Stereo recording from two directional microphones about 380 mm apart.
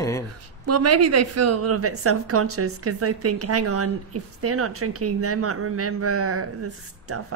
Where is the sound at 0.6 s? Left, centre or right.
Right.